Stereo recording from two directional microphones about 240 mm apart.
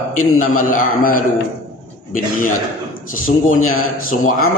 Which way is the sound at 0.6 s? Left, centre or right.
Left.